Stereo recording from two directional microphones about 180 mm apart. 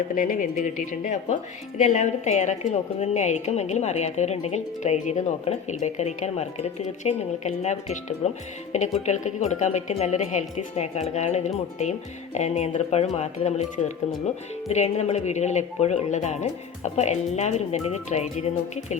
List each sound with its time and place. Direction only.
0.2 s a woman's voice: 45° left (ahead or behind)